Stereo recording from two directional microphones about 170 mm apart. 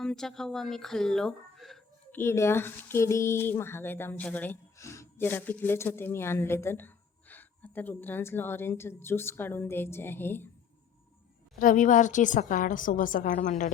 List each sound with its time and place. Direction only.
0.0 s speech: 5° left (ahead or behind)
2.1 s speech: 15° left (ahead or behind)
11.6 s a woman's voice: 50° left (ahead or behind)